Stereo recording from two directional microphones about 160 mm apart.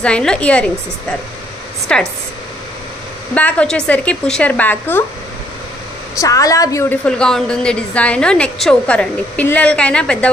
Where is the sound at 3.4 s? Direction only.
10° left (ahead or behind).